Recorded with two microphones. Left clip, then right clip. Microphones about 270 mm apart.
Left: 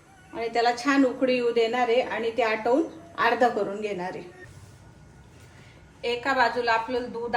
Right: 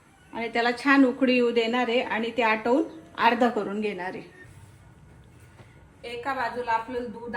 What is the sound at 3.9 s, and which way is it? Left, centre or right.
Speech, right.